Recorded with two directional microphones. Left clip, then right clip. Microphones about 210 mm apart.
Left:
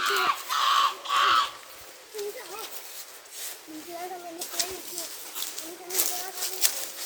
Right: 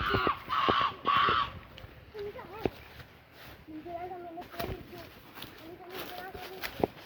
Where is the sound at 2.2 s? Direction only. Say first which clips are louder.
Left 5 dB; 5° left (ahead or behind).